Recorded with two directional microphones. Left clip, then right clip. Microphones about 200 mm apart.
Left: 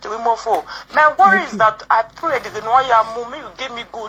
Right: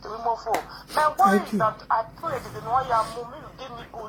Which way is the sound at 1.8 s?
35° left (ahead or behind).